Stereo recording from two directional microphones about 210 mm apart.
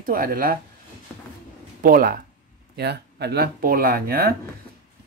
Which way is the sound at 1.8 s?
45° right (ahead or behind).